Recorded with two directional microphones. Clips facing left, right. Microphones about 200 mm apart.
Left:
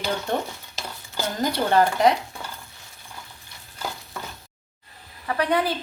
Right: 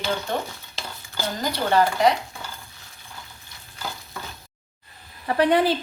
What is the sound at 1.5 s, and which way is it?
Speech, 50° left (ahead or behind).